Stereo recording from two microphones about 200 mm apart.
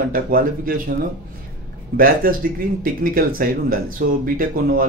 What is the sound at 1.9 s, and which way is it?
Speech, 45° right (ahead or behind).